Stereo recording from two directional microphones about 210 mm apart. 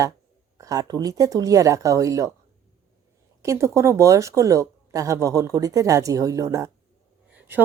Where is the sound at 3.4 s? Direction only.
15° right (ahead or behind).